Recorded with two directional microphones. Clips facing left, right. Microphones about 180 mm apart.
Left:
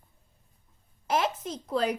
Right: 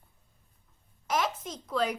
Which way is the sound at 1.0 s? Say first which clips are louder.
Left 3 dB; 30° left (ahead or behind).